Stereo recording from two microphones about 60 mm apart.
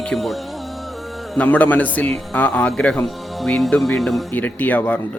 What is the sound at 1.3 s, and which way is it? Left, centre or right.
Speech, left.